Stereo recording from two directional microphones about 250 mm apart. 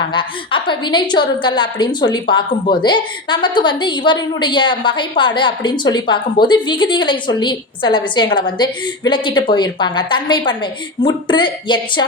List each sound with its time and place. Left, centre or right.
0.1 s a woman's voice: centre